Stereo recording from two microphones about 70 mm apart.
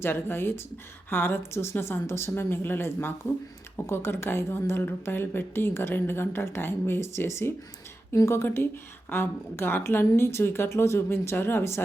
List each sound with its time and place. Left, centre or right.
0.0 s speech: left